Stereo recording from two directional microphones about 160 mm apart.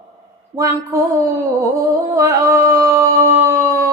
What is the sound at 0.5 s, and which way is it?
Mantra, 40° right (ahead or behind).